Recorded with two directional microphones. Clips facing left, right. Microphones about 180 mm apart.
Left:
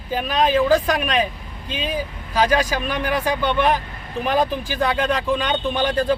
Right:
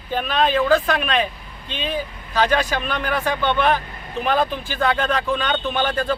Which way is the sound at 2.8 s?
10° left (ahead or behind).